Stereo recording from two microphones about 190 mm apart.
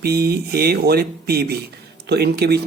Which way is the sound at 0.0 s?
55° right (ahead or behind).